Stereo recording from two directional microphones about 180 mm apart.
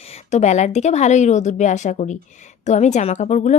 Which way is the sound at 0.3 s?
40° left (ahead or behind).